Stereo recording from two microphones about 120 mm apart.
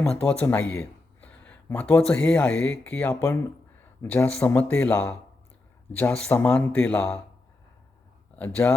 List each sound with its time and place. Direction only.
0.0 s speech: 10° left (ahead or behind)
6.1 s speech: 10° left (ahead or behind)
8.4 s speech: 15° left (ahead or behind)